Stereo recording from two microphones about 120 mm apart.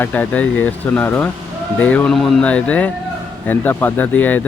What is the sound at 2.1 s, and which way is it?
Speech, centre (ahead or behind).